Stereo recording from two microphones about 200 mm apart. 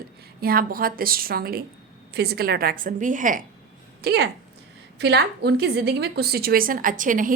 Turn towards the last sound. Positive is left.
turn(degrees=-40)  # may be behind; listen again after turning